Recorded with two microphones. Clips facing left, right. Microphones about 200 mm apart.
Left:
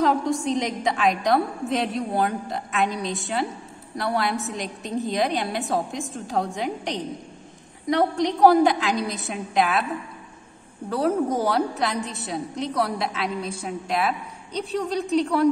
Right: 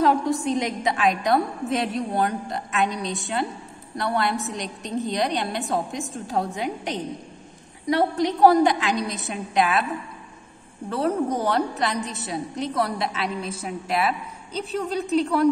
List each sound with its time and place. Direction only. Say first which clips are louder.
0.0 s a woman's voice: right 1 dB; centre (ahead or behind)
10.9 s a woman's voice: left 1 dB; centre (ahead or behind)